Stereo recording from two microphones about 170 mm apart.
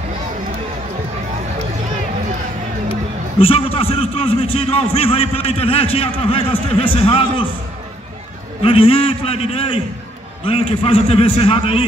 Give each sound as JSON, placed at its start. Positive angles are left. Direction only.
{"t": 3.3, "sound": "a man's voice", "side_deg": 35}
{"t": 8.6, "sound": "a man's voice", "side_deg": 35}